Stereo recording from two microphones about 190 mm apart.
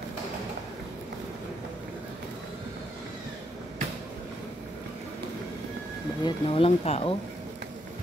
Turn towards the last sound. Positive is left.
turn(degrees=30)  # may be behind; listen again after turning